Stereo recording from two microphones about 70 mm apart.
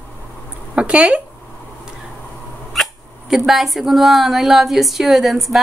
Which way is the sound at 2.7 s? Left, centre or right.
Centre.